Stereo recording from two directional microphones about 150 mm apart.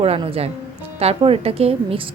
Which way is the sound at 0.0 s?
40° right (ahead or behind).